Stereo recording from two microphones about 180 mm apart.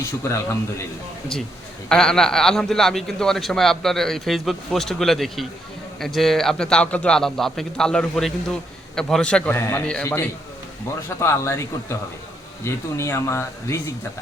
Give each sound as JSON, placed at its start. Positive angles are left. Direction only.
{"t": 1.9, "sound": "a man's voice", "side_deg": 5}